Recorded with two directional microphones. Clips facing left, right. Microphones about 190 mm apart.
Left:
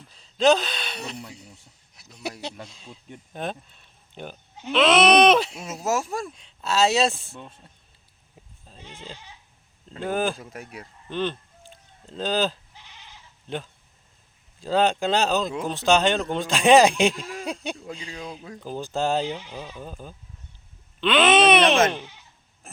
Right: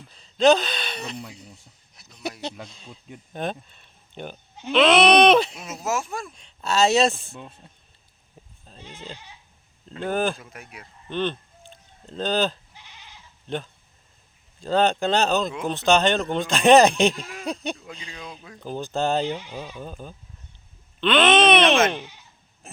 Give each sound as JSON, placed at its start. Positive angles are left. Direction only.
{"t": 0.1, "sound": "speech", "side_deg": 0}
{"t": 5.8, "sound": "speech", "side_deg": 40}
{"t": 6.3, "sound": "speech", "side_deg": 5}
{"t": 7.3, "sound": "speech", "side_deg": -10}
{"t": 8.6, "sound": "sheep", "side_deg": 5}
{"t": 10.0, "sound": "speech", "side_deg": 10}
{"t": 10.4, "sound": "speech", "side_deg": 35}
{"t": 11.1, "sound": "a sound", "side_deg": 5}
{"t": 13.5, "sound": "speech", "side_deg": 5}
{"t": 18.1, "sound": "speech", "side_deg": 35}
{"t": 18.6, "sound": "speech", "side_deg": 10}
{"t": 19.5, "sound": "speech", "side_deg": -5}
{"t": 19.8, "sound": "speech", "side_deg": 5}